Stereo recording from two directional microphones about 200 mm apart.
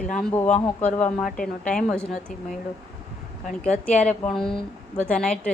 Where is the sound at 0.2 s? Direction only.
5° left (ahead or behind).